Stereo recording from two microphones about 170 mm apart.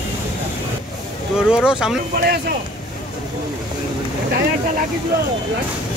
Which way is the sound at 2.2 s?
65° right (ahead or behind).